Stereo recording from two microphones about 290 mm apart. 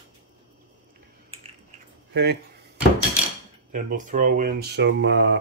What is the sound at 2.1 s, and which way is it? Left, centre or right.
Speech, right.